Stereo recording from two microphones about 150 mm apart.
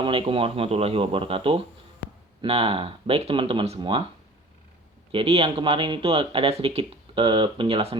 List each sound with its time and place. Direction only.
0.0 s speech: 35° right (ahead or behind)
5.1 s speech: 40° right (ahead or behind)